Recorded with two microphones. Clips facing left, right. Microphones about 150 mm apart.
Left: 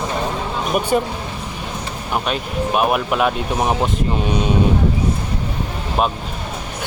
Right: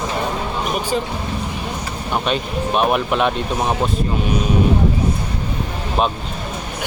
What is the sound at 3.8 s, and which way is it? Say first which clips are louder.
Speech: even; 25° left (ahead or behind).